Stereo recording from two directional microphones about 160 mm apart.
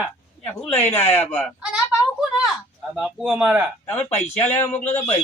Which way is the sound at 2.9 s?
5° right (ahead or behind).